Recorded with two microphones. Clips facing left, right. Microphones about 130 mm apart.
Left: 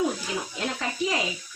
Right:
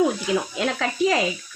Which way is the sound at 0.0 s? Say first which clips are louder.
Right 6 dB; 85° right.